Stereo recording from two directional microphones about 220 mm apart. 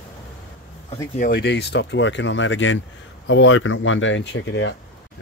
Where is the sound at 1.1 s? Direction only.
40° left (ahead or behind).